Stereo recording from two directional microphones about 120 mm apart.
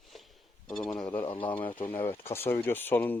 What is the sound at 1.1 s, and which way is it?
Speech, 45° left (ahead or behind).